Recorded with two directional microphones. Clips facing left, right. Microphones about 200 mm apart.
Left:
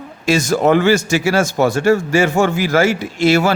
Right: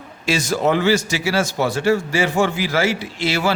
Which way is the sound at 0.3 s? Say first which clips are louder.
Left 5 dB; 45° left (ahead or behind).